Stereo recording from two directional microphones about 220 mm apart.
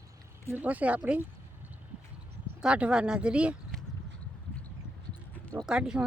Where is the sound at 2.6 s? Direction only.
5° right (ahead or behind).